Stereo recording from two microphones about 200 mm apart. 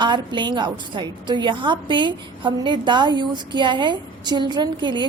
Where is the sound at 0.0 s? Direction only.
25° right (ahead or behind).